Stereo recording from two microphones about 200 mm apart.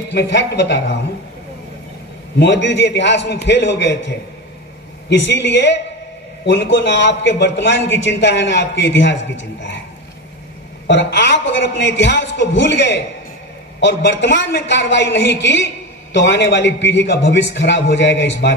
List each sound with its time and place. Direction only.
0.1 s a man's voice: 60° left (ahead or behind)
2.3 s a man's voice: 60° left (ahead or behind)
10.9 s a man's voice: 60° left (ahead or behind)